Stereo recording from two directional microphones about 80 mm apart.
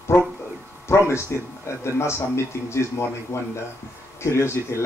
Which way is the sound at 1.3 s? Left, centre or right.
Left.